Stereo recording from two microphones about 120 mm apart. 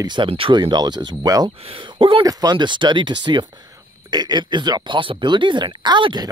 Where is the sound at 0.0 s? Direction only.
40° right (ahead or behind).